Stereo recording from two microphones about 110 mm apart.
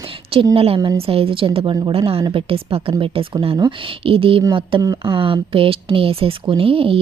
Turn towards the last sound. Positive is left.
turn(degrees=-55)  # may be behind; listen again after turning